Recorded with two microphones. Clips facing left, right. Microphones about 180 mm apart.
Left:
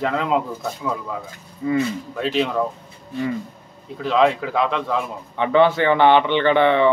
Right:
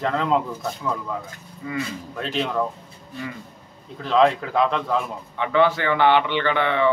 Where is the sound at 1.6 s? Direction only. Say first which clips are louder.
Left 10 dB; 25° left (ahead or behind).